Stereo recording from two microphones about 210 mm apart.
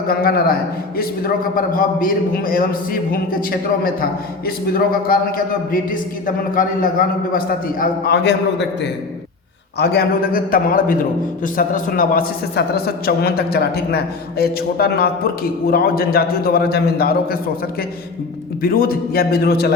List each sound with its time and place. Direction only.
0.1 s a man's voice: 45° left (ahead or behind)
1.5 s a man's voice: 40° left (ahead or behind)
18.6 s a man's voice: 45° left (ahead or behind)